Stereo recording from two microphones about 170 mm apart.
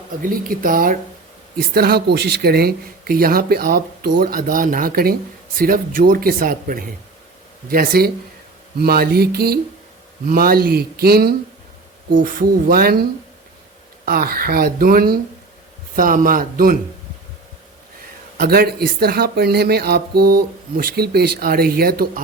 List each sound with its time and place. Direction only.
0.2 s speech: 55° right (ahead or behind)
12.1 s speech: 55° right (ahead or behind)
18.3 s speech: 65° right (ahead or behind)